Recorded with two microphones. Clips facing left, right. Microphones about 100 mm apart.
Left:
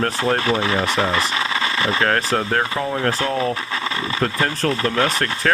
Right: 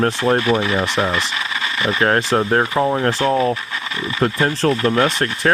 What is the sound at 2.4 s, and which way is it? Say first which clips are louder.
Speech: right 5 dB; 25° right (ahead or behind).